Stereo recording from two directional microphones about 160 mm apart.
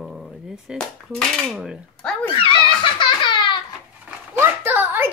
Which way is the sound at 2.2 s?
30° left (ahead or behind).